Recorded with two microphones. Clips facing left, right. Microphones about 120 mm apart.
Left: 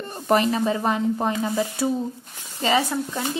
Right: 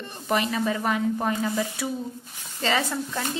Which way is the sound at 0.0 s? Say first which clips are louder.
Left 6 dB; 40° left (ahead or behind).